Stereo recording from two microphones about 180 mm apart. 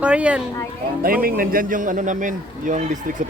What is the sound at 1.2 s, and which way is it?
A man's voice, 55° right (ahead or behind).